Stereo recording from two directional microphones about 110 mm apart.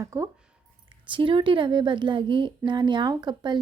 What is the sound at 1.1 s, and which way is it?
A woman's voice, 50° right (ahead or behind).